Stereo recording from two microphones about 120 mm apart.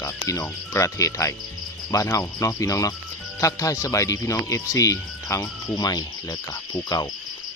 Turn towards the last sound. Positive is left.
turn(degrees=30)  # may be behind; listen again after turning